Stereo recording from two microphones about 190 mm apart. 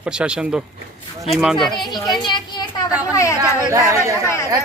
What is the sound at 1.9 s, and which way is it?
A child's voice, 20° left (ahead or behind).